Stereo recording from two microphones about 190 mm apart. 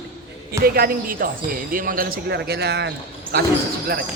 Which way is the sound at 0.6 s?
50° right (ahead or behind).